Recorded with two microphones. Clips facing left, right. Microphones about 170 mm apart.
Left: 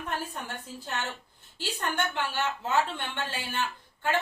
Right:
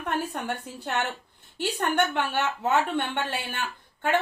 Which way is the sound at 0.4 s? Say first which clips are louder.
Right 7 dB; 65° right (ahead or behind).